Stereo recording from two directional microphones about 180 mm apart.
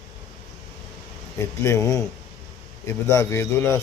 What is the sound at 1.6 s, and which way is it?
A man's voice, 15° left (ahead or behind).